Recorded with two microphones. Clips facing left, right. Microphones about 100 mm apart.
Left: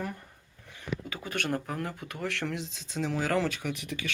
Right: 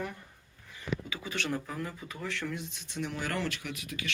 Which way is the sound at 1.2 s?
55° left (ahead or behind).